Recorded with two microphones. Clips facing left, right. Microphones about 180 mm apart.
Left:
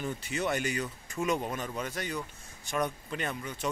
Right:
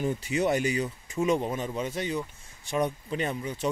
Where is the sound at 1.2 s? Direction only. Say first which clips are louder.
Right 4 dB; 30° right (ahead or behind).